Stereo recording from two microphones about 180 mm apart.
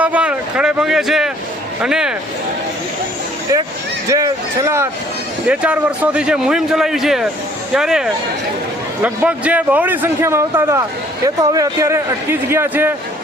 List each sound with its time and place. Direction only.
0.0 s a man's voice: 5° right (ahead or behind)
4.1 s a man's voice: 20° right (ahead or behind)